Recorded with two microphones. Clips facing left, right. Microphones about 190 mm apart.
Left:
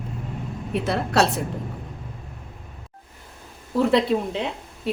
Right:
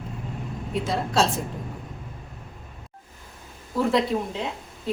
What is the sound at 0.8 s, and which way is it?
Speech, 65° left (ahead or behind).